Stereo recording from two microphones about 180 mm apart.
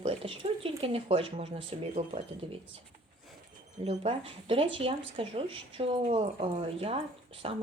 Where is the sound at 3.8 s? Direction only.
35° right (ahead or behind).